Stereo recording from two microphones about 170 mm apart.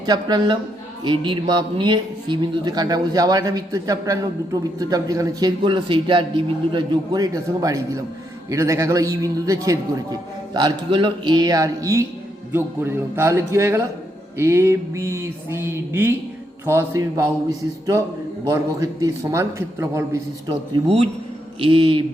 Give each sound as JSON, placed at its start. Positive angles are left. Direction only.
{"t": 0.0, "sound": "speech", "side_deg": -25}
{"t": 20.5, "sound": "speech", "side_deg": -30}